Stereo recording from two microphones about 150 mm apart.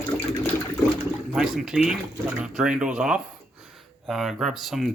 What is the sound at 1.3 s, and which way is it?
Speech, 5° right (ahead or behind).